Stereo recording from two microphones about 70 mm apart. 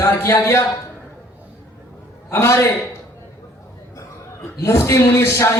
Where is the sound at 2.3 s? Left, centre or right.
Left.